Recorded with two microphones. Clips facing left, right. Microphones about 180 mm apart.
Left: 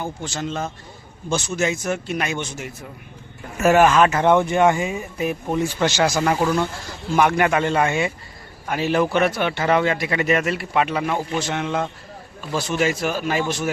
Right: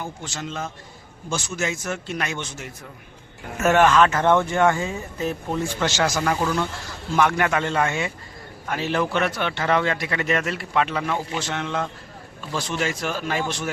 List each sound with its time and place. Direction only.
0.0 s speech: 35° left (ahead or behind)
1.3 s a man's voice: 20° left (ahead or behind)